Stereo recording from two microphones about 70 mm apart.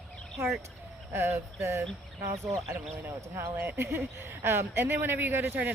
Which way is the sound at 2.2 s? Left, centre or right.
Right.